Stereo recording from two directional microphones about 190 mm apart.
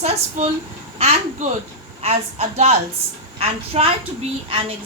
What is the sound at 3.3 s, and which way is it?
Speech, 30° right (ahead or behind).